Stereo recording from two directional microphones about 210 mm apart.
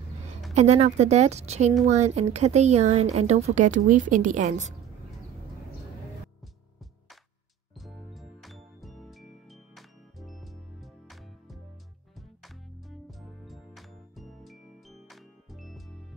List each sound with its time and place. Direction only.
0.6 s a woman's voice: 30° right (ahead or behind)
7.8 s music: centre (ahead or behind)
13.2 s music: centre (ahead or behind)